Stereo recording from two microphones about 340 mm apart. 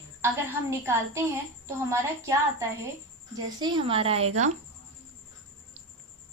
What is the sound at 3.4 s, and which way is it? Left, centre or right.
A woman's voice, centre.